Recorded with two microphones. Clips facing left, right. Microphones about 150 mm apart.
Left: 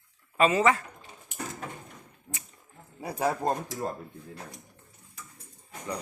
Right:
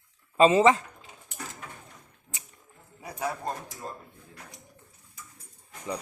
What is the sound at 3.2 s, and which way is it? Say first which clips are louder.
Speech: left 5 dB; 35° left (ahead or behind).